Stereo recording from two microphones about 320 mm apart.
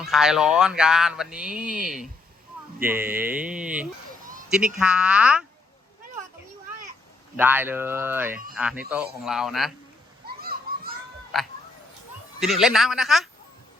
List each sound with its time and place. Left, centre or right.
0.0 s speech: centre
7.3 s speech: centre
10.2 s children playing: right
11.3 s speech: centre